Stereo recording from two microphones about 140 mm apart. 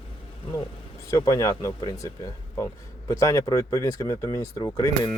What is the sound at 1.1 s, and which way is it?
Speech, 25° left (ahead or behind).